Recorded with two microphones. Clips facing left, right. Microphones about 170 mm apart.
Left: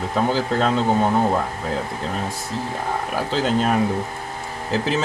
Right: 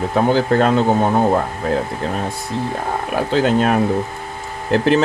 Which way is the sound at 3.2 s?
60° right (ahead or behind).